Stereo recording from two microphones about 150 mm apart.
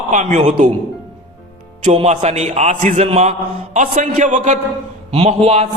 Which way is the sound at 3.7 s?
55° right (ahead or behind).